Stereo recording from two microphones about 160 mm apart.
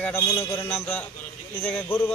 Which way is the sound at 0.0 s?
15° left (ahead or behind).